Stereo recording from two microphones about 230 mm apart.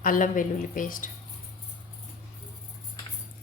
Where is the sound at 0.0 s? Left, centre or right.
Left.